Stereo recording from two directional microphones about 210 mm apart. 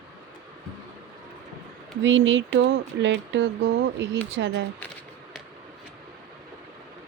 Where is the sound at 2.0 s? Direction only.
65° right (ahead or behind).